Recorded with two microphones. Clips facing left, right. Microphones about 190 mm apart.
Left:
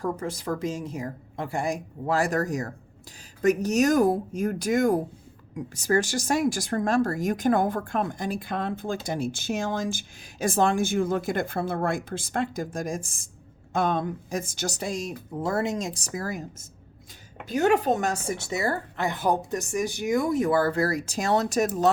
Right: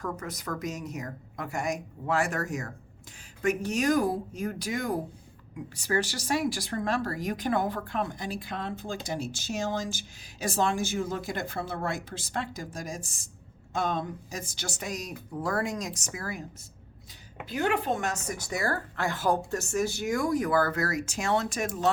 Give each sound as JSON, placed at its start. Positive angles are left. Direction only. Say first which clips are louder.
{"t": 0.0, "sound": "a woman's voice", "louder": "left 6 dB", "side_deg": 30}